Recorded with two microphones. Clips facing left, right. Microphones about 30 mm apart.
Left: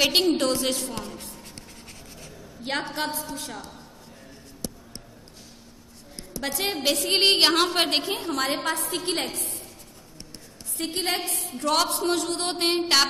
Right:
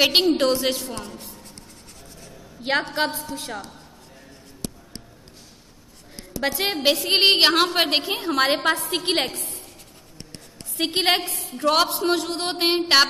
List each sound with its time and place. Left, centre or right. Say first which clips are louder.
0.0 s speech: right 3 dB; right
2.9 s speech: right 5 dB; right
6.4 s a woman's voice: right 5 dB; right
8.1 s a woman's voice: right 5 dB; right
10.8 s a woman's voice: right 7 dB; right
11.3 s a woman's voice: even; centre
11.6 s speech: right 4 dB; right